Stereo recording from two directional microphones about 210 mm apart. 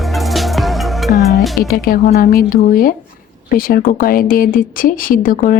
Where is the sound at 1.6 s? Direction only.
45° left (ahead or behind).